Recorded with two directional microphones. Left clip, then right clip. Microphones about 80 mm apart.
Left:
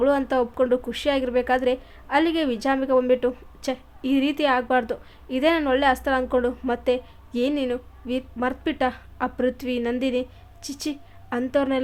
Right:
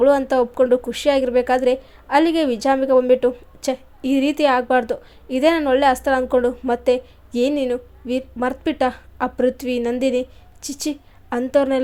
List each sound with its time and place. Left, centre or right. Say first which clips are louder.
0.0 s a woman's voice: right 5 dB; right